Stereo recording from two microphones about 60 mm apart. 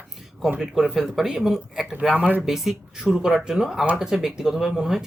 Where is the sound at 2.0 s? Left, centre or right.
Right.